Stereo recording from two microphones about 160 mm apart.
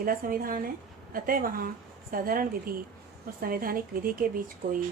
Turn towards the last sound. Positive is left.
turn(degrees=-60)  # may be behind; listen again after turning